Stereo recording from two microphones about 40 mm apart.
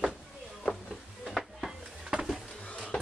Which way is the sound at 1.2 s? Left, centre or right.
Centre.